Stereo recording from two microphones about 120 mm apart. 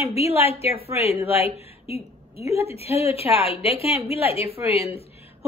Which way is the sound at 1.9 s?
55° left (ahead or behind).